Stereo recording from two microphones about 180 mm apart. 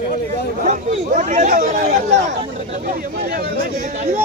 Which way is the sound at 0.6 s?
45° right (ahead or behind).